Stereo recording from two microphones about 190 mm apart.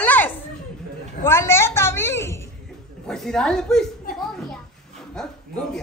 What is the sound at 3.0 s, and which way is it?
Speech, 5° left (ahead or behind).